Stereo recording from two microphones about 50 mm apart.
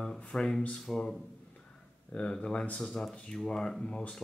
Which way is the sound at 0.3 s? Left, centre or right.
Centre.